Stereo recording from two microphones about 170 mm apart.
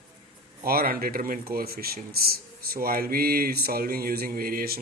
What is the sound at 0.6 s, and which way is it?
Speech, 60° right (ahead or behind).